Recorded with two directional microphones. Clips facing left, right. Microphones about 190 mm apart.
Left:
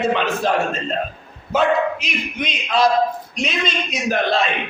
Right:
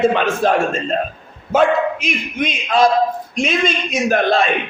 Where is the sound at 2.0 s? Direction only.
50° right (ahead or behind).